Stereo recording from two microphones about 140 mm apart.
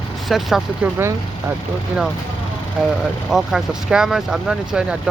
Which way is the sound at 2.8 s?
5° right (ahead or behind).